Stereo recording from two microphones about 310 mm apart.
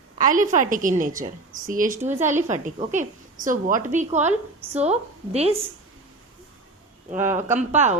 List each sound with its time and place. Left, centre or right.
0.2 s a woman's voice: right
7.5 s a woman's voice: right